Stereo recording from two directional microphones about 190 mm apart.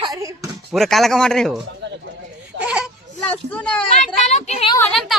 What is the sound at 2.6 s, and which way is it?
Baby cry, 5° right (ahead or behind).